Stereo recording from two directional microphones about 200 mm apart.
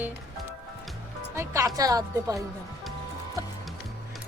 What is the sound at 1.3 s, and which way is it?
Speech, 15° right (ahead or behind).